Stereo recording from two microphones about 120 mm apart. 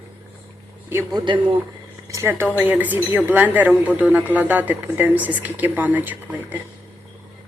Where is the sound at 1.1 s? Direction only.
40° right (ahead or behind).